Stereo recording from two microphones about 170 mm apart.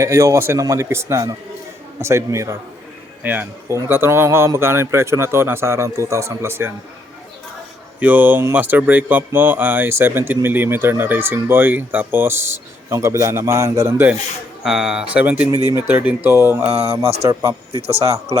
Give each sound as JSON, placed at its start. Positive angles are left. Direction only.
{"t": 0.0, "sound": "a man's voice", "side_deg": -15}
{"t": 7.9, "sound": "a man's voice", "side_deg": -10}
{"t": 14.6, "sound": "a man's voice", "side_deg": -5}
{"t": 17.7, "sound": "a man's voice", "side_deg": -35}